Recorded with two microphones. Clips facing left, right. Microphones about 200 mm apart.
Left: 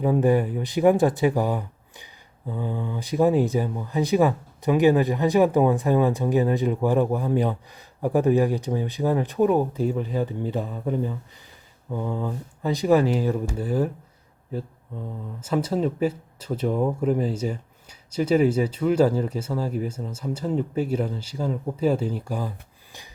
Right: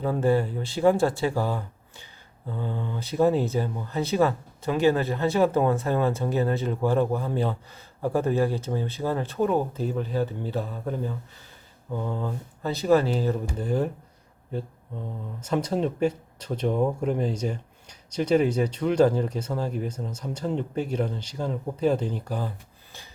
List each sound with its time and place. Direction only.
0.0 s speech: 15° left (ahead or behind)
15.4 s speech: 5° left (ahead or behind)